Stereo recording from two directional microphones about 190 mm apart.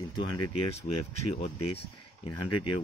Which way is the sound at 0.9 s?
40° left (ahead or behind).